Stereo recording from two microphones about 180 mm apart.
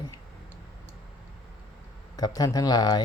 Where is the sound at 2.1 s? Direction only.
20° left (ahead or behind).